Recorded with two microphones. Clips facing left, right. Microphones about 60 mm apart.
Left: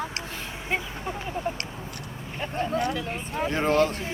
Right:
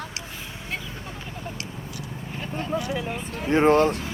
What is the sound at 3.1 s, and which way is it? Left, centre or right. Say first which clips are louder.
Speech: left 1 dB; left.